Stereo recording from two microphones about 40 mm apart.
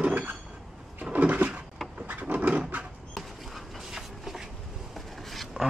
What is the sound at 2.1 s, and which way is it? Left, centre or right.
Wood, right.